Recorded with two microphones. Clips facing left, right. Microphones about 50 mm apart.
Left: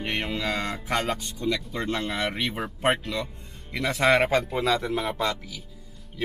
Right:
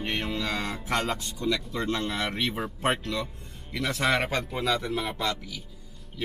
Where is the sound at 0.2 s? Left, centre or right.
Centre.